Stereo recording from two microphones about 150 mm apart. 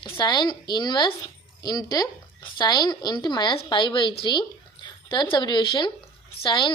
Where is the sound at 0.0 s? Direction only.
30° left (ahead or behind).